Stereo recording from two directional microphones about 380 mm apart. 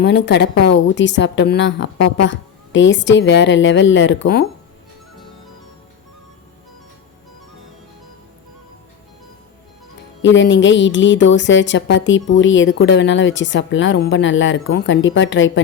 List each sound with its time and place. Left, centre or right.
0.0 s speech: left
10.2 s speech: left